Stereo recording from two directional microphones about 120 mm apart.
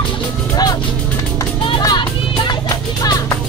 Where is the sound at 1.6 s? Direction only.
40° left (ahead or behind).